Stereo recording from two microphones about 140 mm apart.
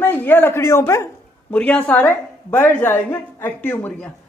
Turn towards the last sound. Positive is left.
turn(degrees=15)  # may be behind; listen again after turning